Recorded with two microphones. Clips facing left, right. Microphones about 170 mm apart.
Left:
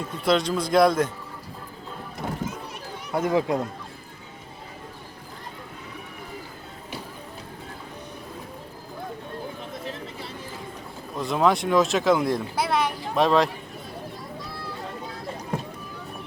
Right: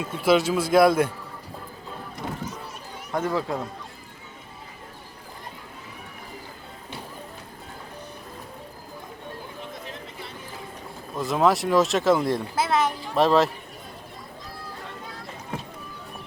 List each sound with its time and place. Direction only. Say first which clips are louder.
0.0 s speech: right 2 dB; 5° right (ahead or behind)
3.1 s speech: left 3 dB; 10° left (ahead or behind)
11.2 s speech: even; centre (ahead or behind)